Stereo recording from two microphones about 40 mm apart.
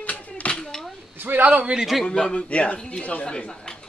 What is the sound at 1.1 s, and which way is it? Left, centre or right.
Speech, right.